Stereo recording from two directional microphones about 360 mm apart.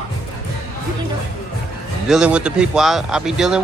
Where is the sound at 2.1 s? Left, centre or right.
Centre.